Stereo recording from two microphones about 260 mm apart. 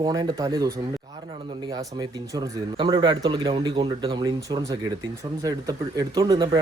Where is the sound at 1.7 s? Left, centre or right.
Centre.